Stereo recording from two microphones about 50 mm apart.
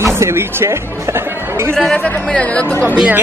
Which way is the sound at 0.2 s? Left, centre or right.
Right.